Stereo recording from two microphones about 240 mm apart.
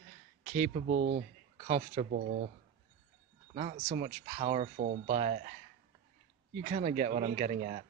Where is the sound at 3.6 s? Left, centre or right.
Right.